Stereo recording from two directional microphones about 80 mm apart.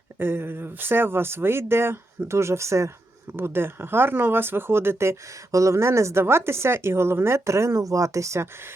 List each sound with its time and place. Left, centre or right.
0.2 s speech: right